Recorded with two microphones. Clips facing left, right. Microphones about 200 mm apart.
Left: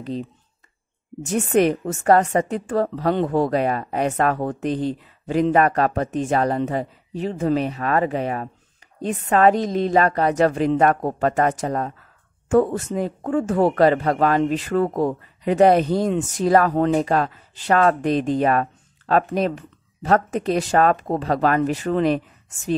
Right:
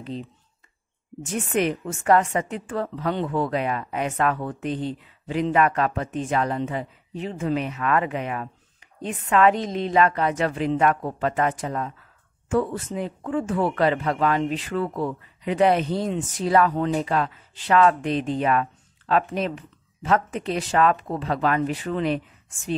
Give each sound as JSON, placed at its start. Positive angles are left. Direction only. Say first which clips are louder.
{"t": 0.0, "sound": "a woman's voice", "louder": "left 5 dB", "side_deg": 40}